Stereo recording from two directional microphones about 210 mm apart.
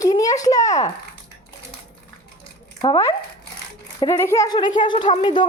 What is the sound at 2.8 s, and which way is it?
Speech, 20° left (ahead or behind).